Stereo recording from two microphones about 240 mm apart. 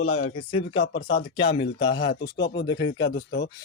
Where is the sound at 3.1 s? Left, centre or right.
Left.